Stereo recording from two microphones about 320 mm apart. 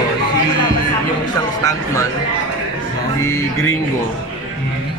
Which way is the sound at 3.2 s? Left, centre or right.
Centre.